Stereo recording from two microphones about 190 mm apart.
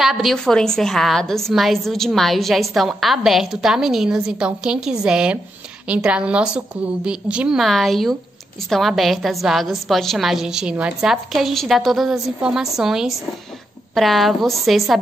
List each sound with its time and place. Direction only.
0.0 s a woman's voice: centre (ahead or behind)